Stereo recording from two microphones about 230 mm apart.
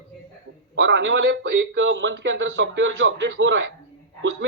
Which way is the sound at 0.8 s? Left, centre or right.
Right.